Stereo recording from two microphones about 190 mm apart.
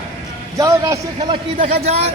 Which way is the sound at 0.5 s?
15° right (ahead or behind).